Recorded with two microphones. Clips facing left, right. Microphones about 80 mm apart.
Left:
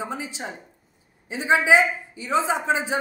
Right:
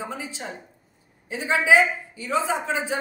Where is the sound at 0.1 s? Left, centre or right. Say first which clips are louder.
Left 2 dB; left.